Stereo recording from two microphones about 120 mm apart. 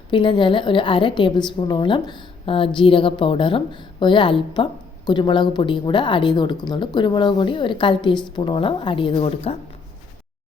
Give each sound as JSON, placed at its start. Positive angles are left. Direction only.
{"t": 0.1, "sound": "a woman's voice", "side_deg": 45}